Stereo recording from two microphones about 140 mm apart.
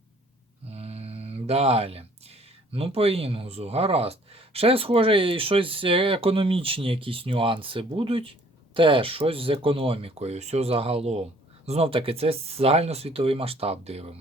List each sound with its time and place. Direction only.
0.7 s speech: 45° right (ahead or behind)